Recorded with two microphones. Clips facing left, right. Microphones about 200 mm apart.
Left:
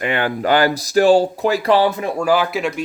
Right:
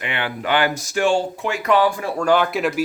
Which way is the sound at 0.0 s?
45° left (ahead or behind).